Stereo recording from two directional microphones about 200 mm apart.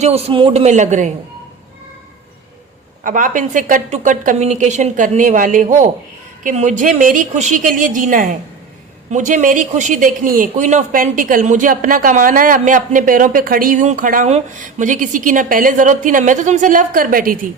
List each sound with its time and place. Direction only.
0.0 s speech: 30° right (ahead or behind)
3.0 s speech: 40° right (ahead or behind)